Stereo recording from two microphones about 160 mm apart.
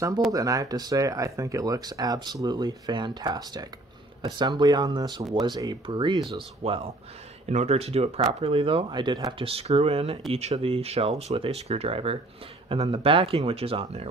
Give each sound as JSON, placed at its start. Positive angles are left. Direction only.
{"t": 0.3, "sound": "speech", "side_deg": -20}
{"t": 7.4, "sound": "speech", "side_deg": -45}